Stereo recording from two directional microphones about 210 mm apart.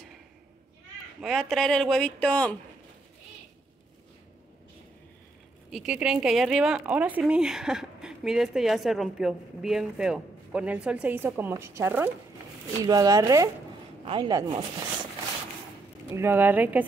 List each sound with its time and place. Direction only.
1.2 s speech: centre (ahead or behind)
5.7 s speech: 5° right (ahead or behind); by 14.6 s 25° right (ahead or behind)
16.2 s speech: 10° right (ahead or behind)